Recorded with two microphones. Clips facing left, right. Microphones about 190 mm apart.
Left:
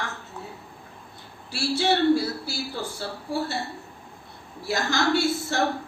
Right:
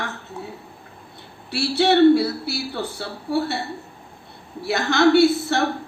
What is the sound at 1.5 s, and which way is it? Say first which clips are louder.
Speech: right 5 dB; 65° right (ahead or behind).